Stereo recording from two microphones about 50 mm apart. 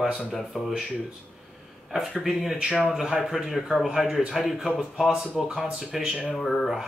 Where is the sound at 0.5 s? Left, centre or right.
Centre.